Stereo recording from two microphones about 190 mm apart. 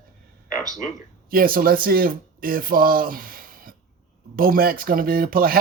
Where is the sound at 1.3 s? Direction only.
50° right (ahead or behind).